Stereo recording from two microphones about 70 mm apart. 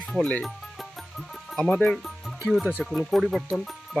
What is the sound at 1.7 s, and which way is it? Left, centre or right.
Speech, centre.